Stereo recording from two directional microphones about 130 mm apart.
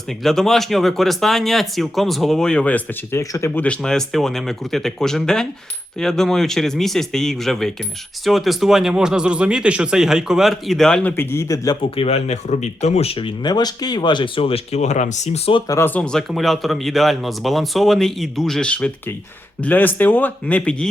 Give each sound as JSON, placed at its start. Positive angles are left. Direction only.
{"t": 0.2, "sound": "speech", "side_deg": 5}
{"t": 3.2, "sound": "a man's voice", "side_deg": 20}
{"t": 3.6, "sound": "speech", "side_deg": 5}
{"t": 11.2, "sound": "a man's voice", "side_deg": 20}
{"t": 11.9, "sound": "speech", "side_deg": 55}
{"t": 15.6, "sound": "a man's voice", "side_deg": 25}
{"t": 15.9, "sound": "speech", "side_deg": 5}